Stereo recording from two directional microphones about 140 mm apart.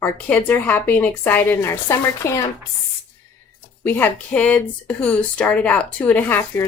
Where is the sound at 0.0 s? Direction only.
10° left (ahead or behind).